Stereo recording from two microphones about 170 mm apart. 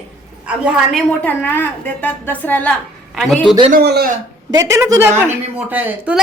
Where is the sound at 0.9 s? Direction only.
10° left (ahead or behind).